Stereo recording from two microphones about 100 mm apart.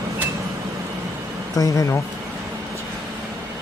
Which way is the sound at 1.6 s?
35° left (ahead or behind).